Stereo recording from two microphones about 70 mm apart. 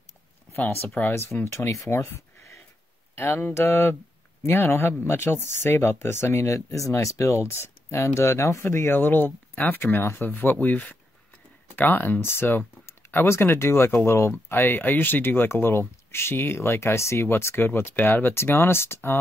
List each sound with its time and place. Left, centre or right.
0.6 s speech: left
1.1 s speech: left
3.2 s speech: left